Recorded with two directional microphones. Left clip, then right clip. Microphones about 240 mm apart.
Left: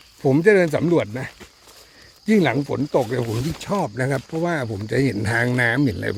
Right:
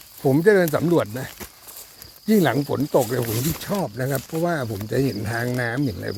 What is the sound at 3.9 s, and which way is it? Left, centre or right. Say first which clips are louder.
Speech: left 2 dB; centre.